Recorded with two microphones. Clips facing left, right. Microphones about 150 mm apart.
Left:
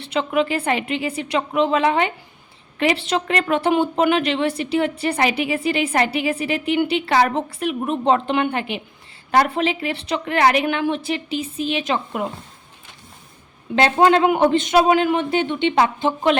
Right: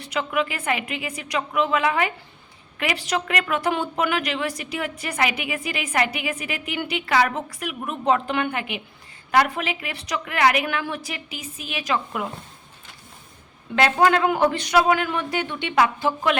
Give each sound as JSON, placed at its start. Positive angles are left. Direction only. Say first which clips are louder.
{"t": 0.0, "sound": "a woman's voice", "louder": "left 4 dB", "side_deg": 30}
{"t": 13.7, "sound": "a woman's voice", "louder": "left 3 dB", "side_deg": 25}